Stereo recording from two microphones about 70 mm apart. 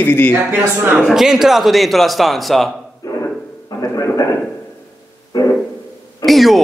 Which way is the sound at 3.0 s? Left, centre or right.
Left.